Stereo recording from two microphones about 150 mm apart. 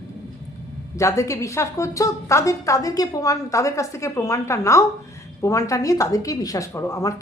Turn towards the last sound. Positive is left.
turn(degrees=20)  # may be behind; listen again after turning